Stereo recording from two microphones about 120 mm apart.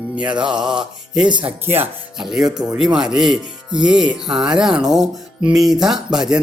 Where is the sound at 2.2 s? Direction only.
5° right (ahead or behind).